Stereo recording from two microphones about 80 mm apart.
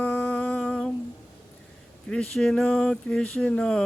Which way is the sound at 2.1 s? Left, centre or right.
Centre.